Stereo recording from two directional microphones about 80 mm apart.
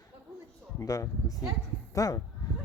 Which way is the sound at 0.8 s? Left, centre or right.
Left.